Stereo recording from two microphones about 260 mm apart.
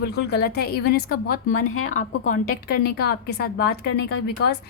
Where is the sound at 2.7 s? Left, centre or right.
Left.